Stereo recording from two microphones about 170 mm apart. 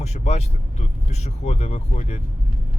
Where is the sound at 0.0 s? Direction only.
40° left (ahead or behind).